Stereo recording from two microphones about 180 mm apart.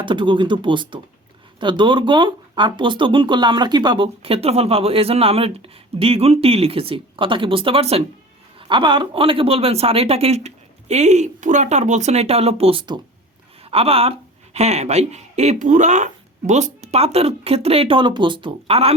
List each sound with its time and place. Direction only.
0.0 s a man's voice: 25° right (ahead or behind)